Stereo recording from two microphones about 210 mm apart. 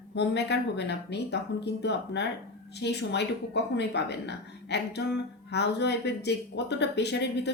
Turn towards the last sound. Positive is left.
turn(degrees=55)  # may be behind; listen again after turning